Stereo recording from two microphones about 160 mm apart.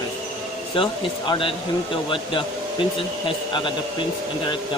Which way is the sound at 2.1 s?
30° left (ahead or behind).